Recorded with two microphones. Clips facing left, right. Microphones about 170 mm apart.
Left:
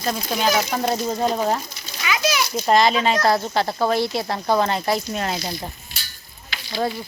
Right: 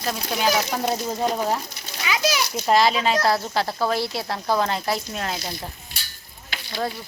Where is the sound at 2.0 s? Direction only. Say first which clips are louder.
Left 1 dB; 35° right (ahead or behind).